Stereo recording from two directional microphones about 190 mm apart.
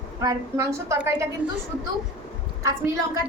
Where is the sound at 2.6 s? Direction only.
15° right (ahead or behind).